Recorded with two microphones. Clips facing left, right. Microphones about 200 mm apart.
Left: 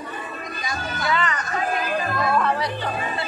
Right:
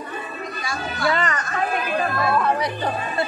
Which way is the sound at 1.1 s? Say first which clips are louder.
Right 1 dB; 45° right (ahead or behind).